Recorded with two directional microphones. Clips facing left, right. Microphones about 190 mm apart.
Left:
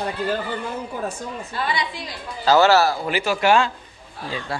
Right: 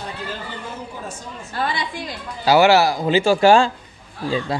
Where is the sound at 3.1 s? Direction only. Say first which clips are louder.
Right 5 dB; 25° right (ahead or behind).